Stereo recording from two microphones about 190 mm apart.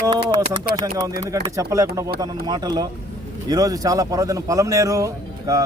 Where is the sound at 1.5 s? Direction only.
20° right (ahead or behind).